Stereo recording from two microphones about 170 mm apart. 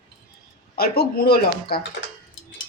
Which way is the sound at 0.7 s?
65° left (ahead or behind).